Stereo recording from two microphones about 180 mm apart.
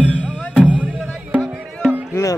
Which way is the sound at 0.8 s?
5° left (ahead or behind).